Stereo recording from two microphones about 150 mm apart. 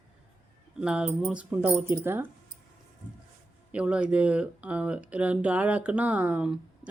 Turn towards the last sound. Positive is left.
turn(degrees=-10)  # may be behind; listen again after turning